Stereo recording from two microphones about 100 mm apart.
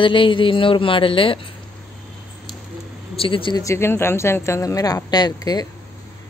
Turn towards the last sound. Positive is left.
turn(degrees=40)  # may be behind; listen again after turning